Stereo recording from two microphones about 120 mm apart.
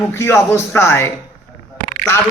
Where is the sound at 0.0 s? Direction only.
20° left (ahead or behind).